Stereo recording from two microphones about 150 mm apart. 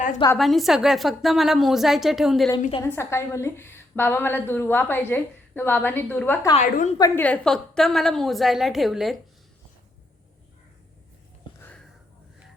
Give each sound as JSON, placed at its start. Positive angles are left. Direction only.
{"t": 0.3, "sound": "a woman's voice", "side_deg": 0}
{"t": 2.6, "sound": "a woman's voice", "side_deg": 40}
{"t": 2.8, "sound": "a woman's voice", "side_deg": 15}
{"t": 6.6, "sound": "a woman's voice", "side_deg": 55}
{"t": 7.2, "sound": "a woman's voice", "side_deg": 5}